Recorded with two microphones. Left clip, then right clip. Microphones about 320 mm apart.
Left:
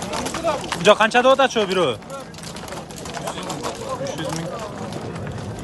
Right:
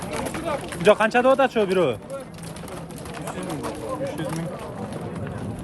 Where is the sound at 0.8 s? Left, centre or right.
Centre.